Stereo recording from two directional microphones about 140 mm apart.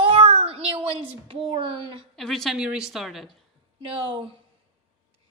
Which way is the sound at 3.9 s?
35° right (ahead or behind).